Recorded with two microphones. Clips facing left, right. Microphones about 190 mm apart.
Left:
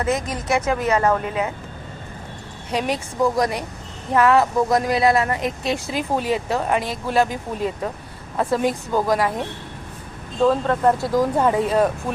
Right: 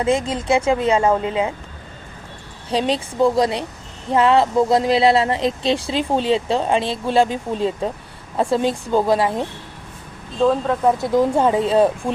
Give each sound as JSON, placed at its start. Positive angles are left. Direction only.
{"t": 0.0, "sound": "speech", "side_deg": -25}
{"t": 2.6, "sound": "speech", "side_deg": -30}
{"t": 10.4, "sound": "speech", "side_deg": -5}
{"t": 10.9, "sound": "speech", "side_deg": -20}